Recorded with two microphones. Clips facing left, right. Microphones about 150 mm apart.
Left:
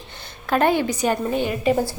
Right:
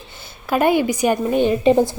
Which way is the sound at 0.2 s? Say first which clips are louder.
Right 1 dB; 10° right (ahead or behind).